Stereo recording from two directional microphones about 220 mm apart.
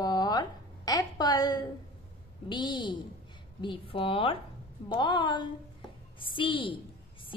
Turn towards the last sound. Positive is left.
turn(degrees=20)  # may be behind; listen again after turning